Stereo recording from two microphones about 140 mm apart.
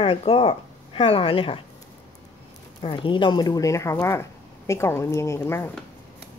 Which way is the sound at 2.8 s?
35° left (ahead or behind).